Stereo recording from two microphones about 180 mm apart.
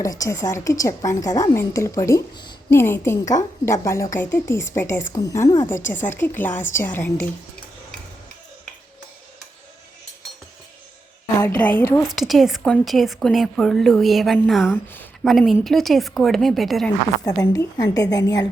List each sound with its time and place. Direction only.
0.0 s a woman's voice: 20° left (ahead or behind)
2.6 s a woman's voice: 15° left (ahead or behind)
11.3 s a woman's voice: 10° left (ahead or behind)
12.0 s a woman's voice: centre (ahead or behind)
17.2 s a woman's voice: 20° left (ahead or behind)